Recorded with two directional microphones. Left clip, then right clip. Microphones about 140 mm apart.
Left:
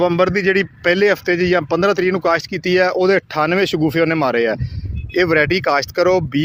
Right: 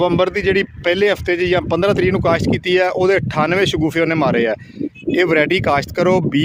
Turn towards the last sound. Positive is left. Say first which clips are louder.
# even
turn(degrees=-35)  # may be behind; listen again after turning